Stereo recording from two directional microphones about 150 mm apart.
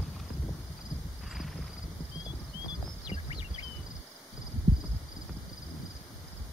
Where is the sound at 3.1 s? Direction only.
30° left (ahead or behind).